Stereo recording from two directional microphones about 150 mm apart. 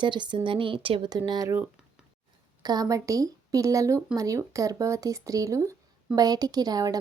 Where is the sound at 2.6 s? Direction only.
25° right (ahead or behind).